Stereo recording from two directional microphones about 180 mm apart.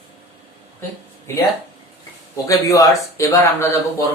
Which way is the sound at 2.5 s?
20° left (ahead or behind).